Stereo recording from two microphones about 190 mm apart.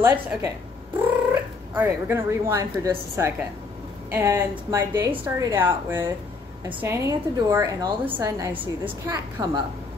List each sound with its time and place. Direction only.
0.0 s a woman's voice: 10° right (ahead or behind)
1.8 s a woman's voice: 15° right (ahead or behind)